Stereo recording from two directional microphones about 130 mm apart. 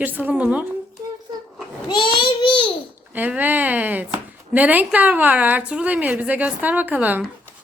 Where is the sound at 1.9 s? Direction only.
35° left (ahead or behind).